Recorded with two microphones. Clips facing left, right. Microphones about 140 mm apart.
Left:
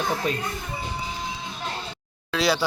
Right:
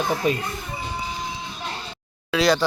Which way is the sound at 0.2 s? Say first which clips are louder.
Right 4 dB; 5° right (ahead or behind).